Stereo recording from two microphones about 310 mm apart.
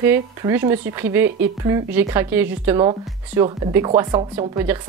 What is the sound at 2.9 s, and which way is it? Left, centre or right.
Speech, centre.